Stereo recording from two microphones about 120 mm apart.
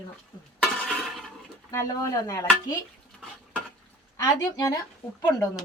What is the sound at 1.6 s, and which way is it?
Speech, 30° left (ahead or behind).